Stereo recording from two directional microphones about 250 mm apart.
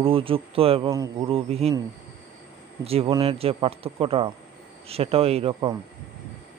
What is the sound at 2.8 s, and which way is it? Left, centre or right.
A man's voice, right.